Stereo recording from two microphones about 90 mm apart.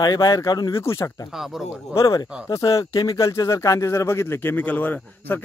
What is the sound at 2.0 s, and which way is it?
Speech, 40° left (ahead or behind).